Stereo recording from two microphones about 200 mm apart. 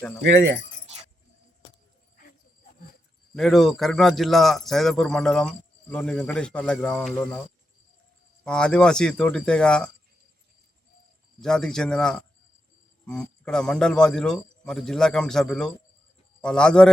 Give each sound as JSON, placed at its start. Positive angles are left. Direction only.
{"t": 0.3, "sound": "speech", "side_deg": -60}
{"t": 3.3, "sound": "a man's voice", "side_deg": 0}
{"t": 8.4, "sound": "a man's voice", "side_deg": 5}
{"t": 11.3, "sound": "a man's voice", "side_deg": 5}